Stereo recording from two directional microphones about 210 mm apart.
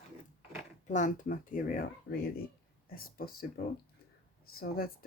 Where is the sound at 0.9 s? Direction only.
35° left (ahead or behind).